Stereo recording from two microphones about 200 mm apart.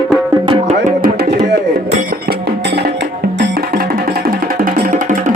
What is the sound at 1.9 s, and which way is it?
Music, 35° right (ahead or behind).